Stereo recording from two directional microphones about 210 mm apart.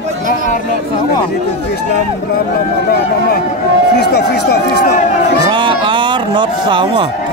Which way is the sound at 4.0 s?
50° left (ahead or behind).